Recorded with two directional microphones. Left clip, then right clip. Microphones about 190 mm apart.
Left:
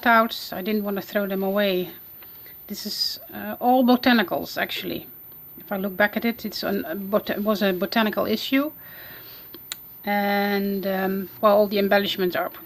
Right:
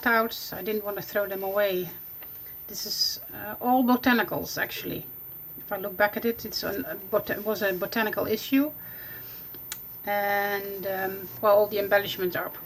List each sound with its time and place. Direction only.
0.0 s speech: 45° left (ahead or behind)